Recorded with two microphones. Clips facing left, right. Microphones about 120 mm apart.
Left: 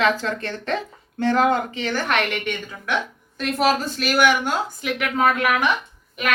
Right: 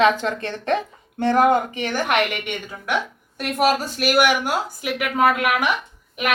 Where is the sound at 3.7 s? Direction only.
10° right (ahead or behind).